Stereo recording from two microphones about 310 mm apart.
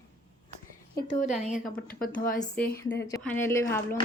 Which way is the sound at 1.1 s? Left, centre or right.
Left.